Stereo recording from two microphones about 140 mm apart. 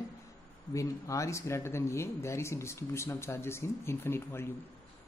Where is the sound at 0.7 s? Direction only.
25° left (ahead or behind).